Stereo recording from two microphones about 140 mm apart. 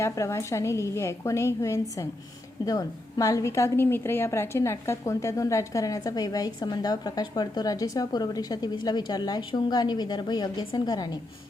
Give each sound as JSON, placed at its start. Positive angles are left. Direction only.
{"t": 0.0, "sound": "a woman's voice", "side_deg": 20}